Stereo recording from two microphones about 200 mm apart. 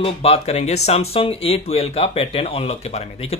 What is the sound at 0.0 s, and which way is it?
Speech, 30° left (ahead or behind).